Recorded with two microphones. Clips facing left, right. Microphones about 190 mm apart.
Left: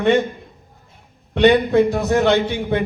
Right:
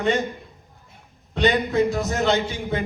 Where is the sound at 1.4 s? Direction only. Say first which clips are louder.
Left 6 dB; 60° left (ahead or behind).